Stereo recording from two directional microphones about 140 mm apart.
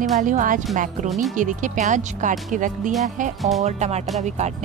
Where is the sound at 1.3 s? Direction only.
65° right (ahead or behind).